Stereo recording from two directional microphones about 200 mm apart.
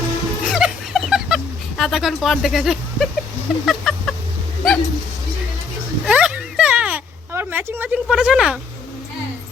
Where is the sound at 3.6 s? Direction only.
Centre (ahead or behind).